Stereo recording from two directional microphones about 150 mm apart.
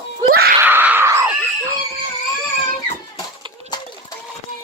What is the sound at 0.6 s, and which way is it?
Screaming, 15° right (ahead or behind).